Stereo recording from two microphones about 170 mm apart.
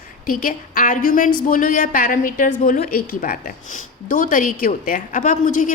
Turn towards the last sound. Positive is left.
turn(degrees=50)  # may be behind; listen again after turning